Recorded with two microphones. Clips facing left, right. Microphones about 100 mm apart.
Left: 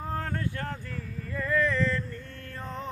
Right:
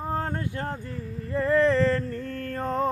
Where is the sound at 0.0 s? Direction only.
25° right (ahead or behind).